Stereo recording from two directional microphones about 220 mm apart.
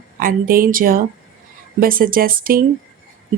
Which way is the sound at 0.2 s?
40° right (ahead or behind).